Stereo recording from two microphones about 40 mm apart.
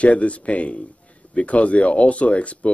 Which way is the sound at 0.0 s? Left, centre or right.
Left.